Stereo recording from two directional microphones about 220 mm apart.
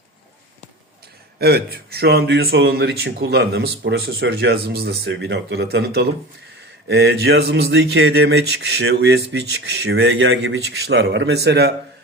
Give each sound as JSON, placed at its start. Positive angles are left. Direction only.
{"t": 1.4, "sound": "speech", "side_deg": -45}